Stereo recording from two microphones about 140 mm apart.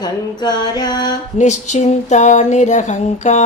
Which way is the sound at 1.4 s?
60° left (ahead or behind).